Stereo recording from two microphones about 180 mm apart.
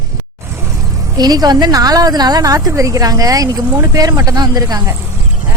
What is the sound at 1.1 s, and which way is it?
A woman's voice, 20° right (ahead or behind).